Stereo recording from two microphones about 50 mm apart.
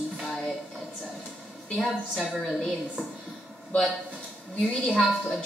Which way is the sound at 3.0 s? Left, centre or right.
Left.